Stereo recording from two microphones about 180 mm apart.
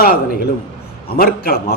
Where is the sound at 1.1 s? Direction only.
55° left (ahead or behind).